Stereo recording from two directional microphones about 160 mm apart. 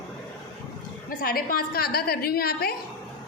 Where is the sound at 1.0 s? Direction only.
65° left (ahead or behind).